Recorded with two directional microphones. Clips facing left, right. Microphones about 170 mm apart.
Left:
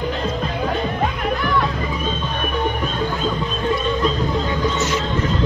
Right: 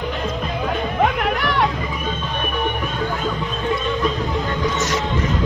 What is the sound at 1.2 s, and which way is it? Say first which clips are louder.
Music: right 1 dB; 75° right (ahead or behind).